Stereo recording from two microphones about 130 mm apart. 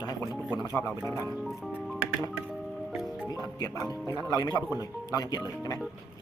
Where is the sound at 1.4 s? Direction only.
Centre (ahead or behind).